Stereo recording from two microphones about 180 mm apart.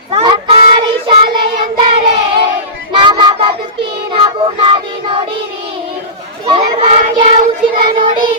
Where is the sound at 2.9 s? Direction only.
25° right (ahead or behind).